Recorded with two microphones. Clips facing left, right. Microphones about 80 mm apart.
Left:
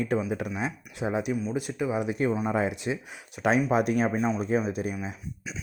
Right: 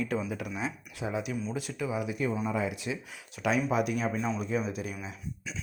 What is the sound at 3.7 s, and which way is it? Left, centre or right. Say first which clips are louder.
Speech: left 5 dB; left.